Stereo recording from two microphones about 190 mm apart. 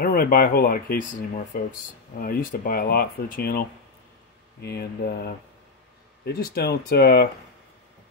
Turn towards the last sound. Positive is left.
turn(degrees=55)  # may be behind; listen again after turning